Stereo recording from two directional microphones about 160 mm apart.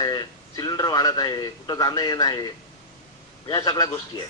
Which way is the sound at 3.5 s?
20° left (ahead or behind).